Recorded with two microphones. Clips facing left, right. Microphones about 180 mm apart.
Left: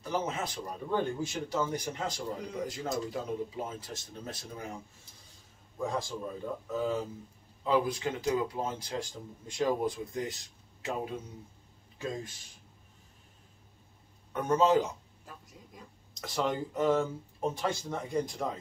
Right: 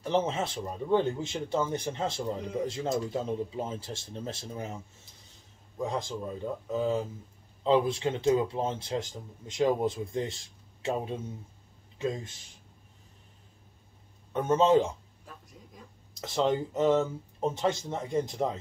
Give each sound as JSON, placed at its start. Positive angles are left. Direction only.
{"t": 0.0, "sound": "speech", "side_deg": -25}
{"t": 5.8, "sound": "speech", "side_deg": -20}
{"t": 14.3, "sound": "speech", "side_deg": -25}
{"t": 15.2, "sound": "a sound", "side_deg": 0}
{"t": 16.3, "sound": "speech", "side_deg": -25}